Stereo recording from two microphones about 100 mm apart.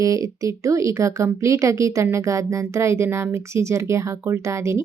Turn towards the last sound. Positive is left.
turn(degrees=-30)  # may be behind; listen again after turning